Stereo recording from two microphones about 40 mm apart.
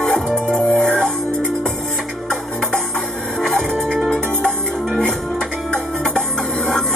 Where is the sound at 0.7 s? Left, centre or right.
Left.